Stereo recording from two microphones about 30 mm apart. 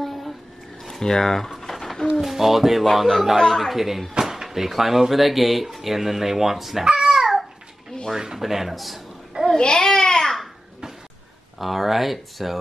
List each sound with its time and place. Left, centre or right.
0.0 s a sound: centre
0.8 s speech: centre
1.5 s a sound: centre
2.2 s speech: centre
3.7 s speech: centre
7.0 s babbling: centre
8.4 s speech: centre
9.6 s babbling: left
11.5 s speech: centre